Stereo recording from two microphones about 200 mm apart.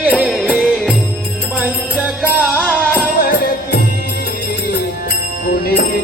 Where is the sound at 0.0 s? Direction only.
Centre (ahead or behind).